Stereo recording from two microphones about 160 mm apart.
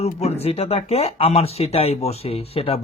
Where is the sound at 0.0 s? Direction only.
40° left (ahead or behind).